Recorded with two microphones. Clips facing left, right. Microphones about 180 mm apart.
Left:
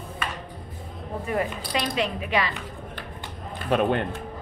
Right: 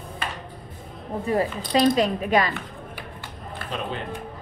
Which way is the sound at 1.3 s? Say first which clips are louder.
Right 5 dB; 30° right (ahead or behind).